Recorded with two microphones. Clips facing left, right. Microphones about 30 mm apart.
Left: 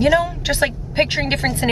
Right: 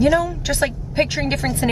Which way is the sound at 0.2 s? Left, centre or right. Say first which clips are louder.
Left 1 dB; left.